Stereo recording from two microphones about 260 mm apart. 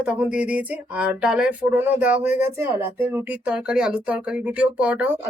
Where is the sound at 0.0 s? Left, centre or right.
Centre.